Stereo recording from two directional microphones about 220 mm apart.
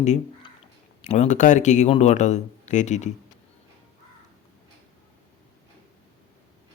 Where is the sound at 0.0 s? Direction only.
30° left (ahead or behind).